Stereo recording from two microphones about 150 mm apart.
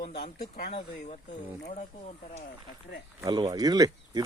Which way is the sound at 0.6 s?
45° left (ahead or behind).